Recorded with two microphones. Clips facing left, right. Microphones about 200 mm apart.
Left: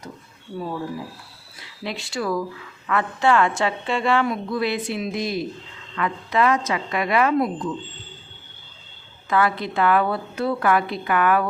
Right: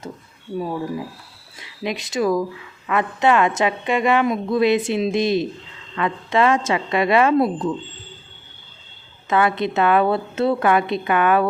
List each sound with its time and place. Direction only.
1.5 s a woman's voice: 15° right (ahead or behind)
9.3 s a woman's voice: 20° right (ahead or behind)